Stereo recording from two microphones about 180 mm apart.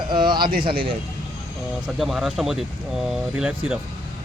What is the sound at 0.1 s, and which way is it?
Bird, 25° right (ahead or behind).